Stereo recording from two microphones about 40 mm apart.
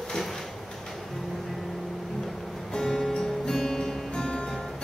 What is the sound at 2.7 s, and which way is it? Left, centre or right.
Music, centre.